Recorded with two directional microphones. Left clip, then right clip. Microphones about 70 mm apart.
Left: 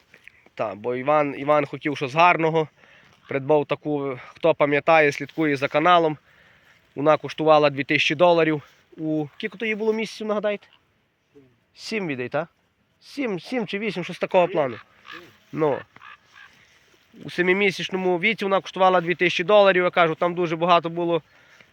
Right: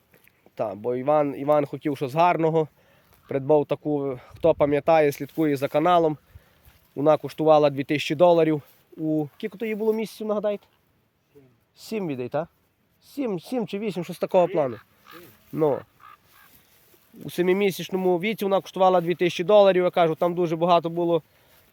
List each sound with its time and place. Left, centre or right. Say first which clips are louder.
0.1 s speech: left 8 dB; right
9.7 s speech: right 2 dB; centre
11.8 s speech: left 2 dB; centre
14.1 s speech: left 1 dB; right
15.5 s speech: even; right
17.2 s speech: left 2 dB; right
21.0 s a sound: even; right